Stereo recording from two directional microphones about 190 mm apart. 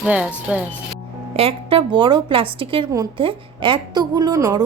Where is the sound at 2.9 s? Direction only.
15° right (ahead or behind).